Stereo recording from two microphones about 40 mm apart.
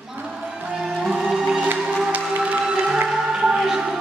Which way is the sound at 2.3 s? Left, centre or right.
Right.